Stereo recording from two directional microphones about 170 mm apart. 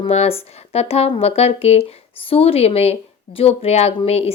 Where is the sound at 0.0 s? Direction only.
35° left (ahead or behind).